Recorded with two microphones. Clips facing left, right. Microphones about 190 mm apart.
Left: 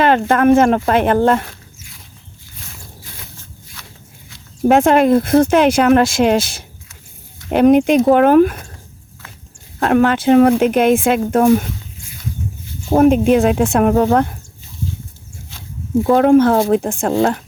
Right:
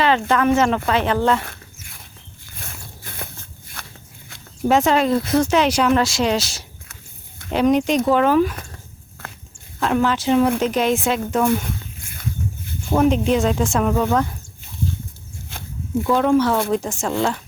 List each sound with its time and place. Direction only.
0.0 s speech: 50° left (ahead or behind)
1.5 s a sound: 55° right (ahead or behind)
3.8 s biting: 55° right (ahead or behind)
4.7 s speech: 55° left (ahead or behind)
9.8 s speech: 60° left (ahead or behind)
12.9 s speech: 35° left (ahead or behind)
13.2 s speech: 60° left (ahead or behind)
16.0 s speech: 55° left (ahead or behind)